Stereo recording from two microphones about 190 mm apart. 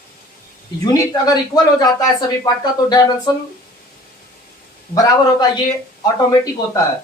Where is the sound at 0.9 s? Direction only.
20° left (ahead or behind).